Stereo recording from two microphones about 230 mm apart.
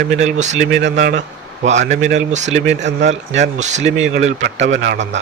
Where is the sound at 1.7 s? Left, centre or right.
Right.